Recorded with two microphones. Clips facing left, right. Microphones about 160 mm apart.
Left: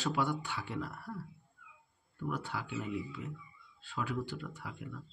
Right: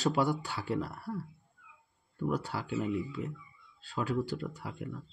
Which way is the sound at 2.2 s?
35° right (ahead or behind).